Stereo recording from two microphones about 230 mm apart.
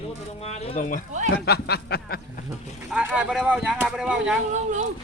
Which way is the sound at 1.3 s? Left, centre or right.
Left.